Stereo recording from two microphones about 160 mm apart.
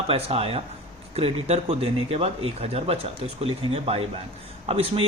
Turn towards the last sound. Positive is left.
turn(degrees=-35)  # may be behind; listen again after turning